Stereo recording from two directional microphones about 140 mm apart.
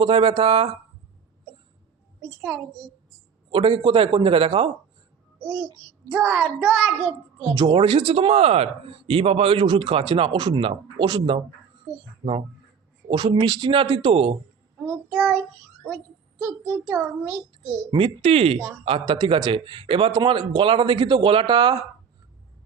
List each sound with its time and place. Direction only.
0.0 s speech: 35° right (ahead or behind)
3.5 s speech: 35° right (ahead or behind)
6.1 s a child's voice: 10° right (ahead or behind)
7.5 s speech: 25° right (ahead or behind)
7.8 s speech: 40° right (ahead or behind)
12.2 s speech: 25° right (ahead or behind)
13.1 s speech: 35° right (ahead or behind)
14.8 s child singing: centre (ahead or behind)
16.4 s child singing: 5° left (ahead or behind)
17.9 s speech: 40° right (ahead or behind)
18.9 s speech: 35° right (ahead or behind)